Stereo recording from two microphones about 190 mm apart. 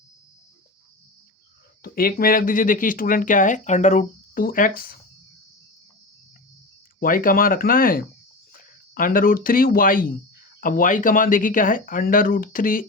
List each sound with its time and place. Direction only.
1.8 s speech: 50° left (ahead or behind)
7.0 s speech: 45° left (ahead or behind)